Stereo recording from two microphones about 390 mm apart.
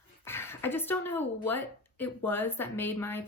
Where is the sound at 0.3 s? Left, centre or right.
Centre.